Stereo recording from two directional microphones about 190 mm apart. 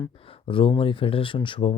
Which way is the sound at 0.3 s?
25° left (ahead or behind).